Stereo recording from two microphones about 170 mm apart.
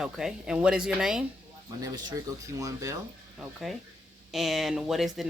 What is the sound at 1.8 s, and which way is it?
Speech, 25° right (ahead or behind).